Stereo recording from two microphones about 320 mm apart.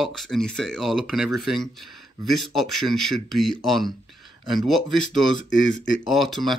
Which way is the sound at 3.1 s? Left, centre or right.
Centre.